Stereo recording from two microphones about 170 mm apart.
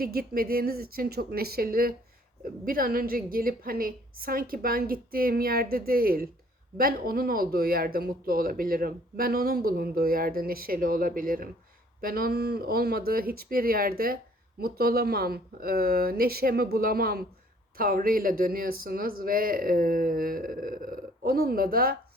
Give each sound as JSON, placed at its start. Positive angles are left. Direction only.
{"t": 0.0, "sound": "speech", "side_deg": -60}